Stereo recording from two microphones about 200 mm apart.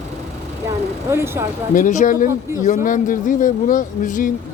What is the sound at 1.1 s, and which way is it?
Speech, 10° right (ahead or behind).